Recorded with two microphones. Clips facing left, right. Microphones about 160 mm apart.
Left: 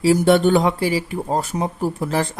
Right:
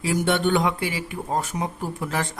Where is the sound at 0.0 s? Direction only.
35° left (ahead or behind).